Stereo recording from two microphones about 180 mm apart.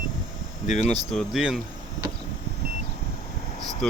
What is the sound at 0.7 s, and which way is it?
Speech, 40° left (ahead or behind).